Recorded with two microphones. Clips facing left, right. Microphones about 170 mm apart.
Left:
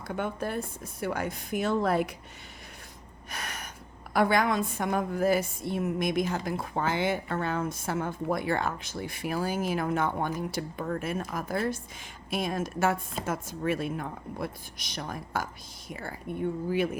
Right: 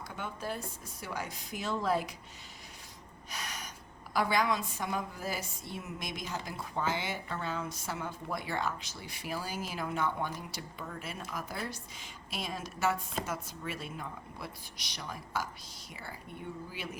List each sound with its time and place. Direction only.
0.1 s a woman's voice: 55° left (ahead or behind)
3.2 s a sound: 55° left (ahead or behind)
4.1 s a woman's voice: 55° left (ahead or behind)